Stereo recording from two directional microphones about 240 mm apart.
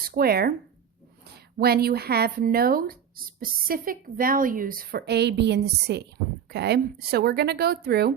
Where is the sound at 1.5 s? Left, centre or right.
Right.